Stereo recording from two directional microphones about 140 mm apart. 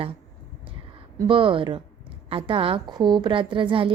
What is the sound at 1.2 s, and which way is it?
A woman's voice, 40° right (ahead or behind).